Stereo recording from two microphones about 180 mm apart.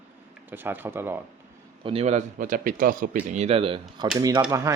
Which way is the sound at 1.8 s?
35° right (ahead or behind).